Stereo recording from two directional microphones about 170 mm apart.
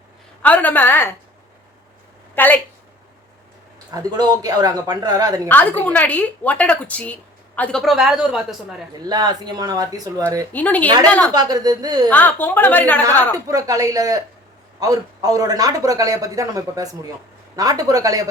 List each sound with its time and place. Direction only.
0.4 s a woman's voice: 10° left (ahead or behind)
2.3 s a woman's voice: 10° left (ahead or behind)
3.9 s speech: 25° right (ahead or behind)
5.5 s a woman's voice: 10° left (ahead or behind)
9.0 s speech: 25° right (ahead or behind)
10.5 s a woman's voice: 10° left (ahead or behind)
11.3 s speech: 20° right (ahead or behind)
12.0 s a woman's voice: 10° left (ahead or behind)
13.5 s speech: 20° right (ahead or behind)